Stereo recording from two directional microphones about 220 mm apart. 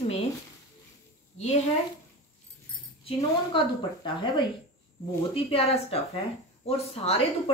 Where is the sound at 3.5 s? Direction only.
20° left (ahead or behind).